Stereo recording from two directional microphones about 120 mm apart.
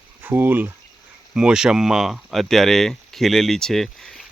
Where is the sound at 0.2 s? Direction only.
15° right (ahead or behind).